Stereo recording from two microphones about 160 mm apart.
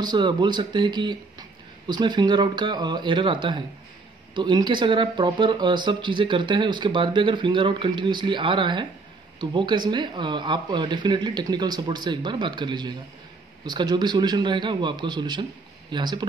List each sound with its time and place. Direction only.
0.0 s speech: 25° right (ahead or behind)